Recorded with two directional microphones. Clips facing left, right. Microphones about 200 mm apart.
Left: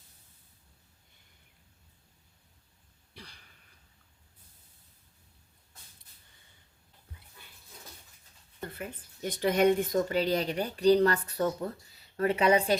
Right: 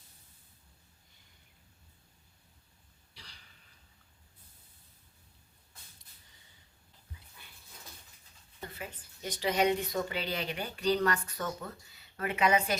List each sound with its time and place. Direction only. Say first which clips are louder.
3.2 s throat clearing: left 7 dB; 55° left (ahead or behind)
8.6 s a woman's voice: left 4 dB; 55° left (ahead or behind); by 12.8 s 35° left (ahead or behind)